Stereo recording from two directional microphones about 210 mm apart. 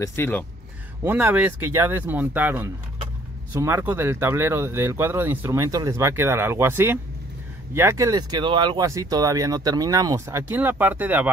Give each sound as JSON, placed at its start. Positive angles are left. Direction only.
{"t": 0.0, "sound": "speech", "side_deg": 10}
{"t": 1.0, "sound": "speech", "side_deg": -10}